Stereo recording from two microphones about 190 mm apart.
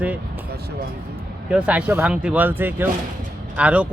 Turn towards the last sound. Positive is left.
turn(degrees=-5)  # may be behind; listen again after turning